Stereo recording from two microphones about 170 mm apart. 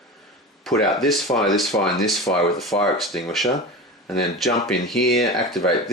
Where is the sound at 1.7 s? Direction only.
20° left (ahead or behind).